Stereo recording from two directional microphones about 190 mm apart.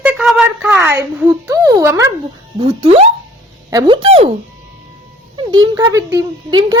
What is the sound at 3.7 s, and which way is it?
Speech, 20° right (ahead or behind).